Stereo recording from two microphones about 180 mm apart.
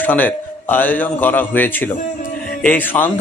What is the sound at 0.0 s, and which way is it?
Speech, 10° left (ahead or behind).